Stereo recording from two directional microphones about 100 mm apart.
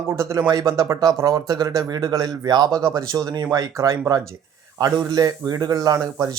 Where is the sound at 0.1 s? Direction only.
30° right (ahead or behind).